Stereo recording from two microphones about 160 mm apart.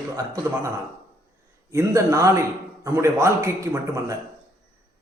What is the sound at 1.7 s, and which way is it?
A man's voice, 20° right (ahead or behind).